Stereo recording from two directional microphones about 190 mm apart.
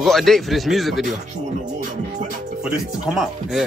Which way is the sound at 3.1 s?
Centre (ahead or behind).